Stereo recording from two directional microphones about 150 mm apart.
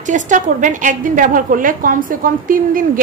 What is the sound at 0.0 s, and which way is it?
A woman's voice, 55° right (ahead or behind).